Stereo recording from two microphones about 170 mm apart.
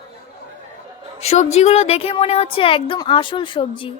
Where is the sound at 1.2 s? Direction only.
40° left (ahead or behind).